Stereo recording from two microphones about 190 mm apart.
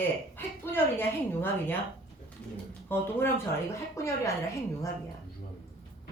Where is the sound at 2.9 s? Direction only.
10° left (ahead or behind).